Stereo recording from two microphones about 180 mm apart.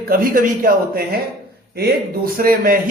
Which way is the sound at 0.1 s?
50° right (ahead or behind).